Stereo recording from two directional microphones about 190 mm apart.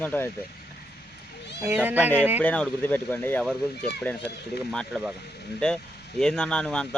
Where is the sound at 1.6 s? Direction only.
10° right (ahead or behind).